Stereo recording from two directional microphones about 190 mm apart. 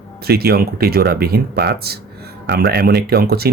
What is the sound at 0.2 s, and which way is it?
Speech, 55° right (ahead or behind).